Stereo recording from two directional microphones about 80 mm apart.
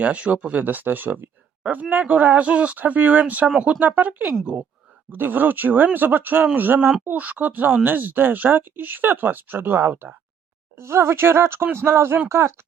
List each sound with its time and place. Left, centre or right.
0.0 s speech: centre; by 12.5 s right